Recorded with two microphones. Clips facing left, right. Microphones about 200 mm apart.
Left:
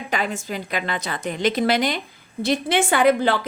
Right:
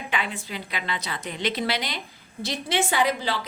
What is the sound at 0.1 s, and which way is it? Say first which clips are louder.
A woman's voice: left 6 dB; 45° left (ahead or behind).